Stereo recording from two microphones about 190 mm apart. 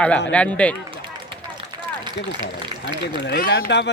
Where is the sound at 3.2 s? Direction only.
55° left (ahead or behind).